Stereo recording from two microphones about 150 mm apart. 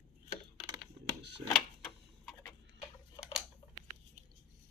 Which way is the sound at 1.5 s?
5° left (ahead or behind).